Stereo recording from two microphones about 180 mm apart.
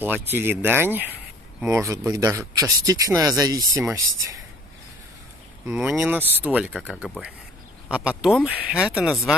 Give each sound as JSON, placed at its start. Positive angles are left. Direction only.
{"t": 0.0, "sound": "speech", "side_deg": -10}
{"t": 5.7, "sound": "speech", "side_deg": -5}